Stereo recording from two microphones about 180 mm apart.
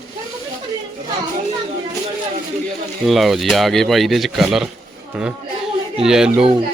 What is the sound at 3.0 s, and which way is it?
Speech, centre (ahead or behind).